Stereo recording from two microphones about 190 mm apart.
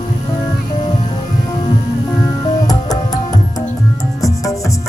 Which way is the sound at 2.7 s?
20° left (ahead or behind).